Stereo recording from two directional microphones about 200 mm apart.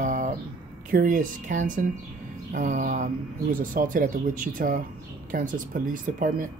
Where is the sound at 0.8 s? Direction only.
45° right (ahead or behind).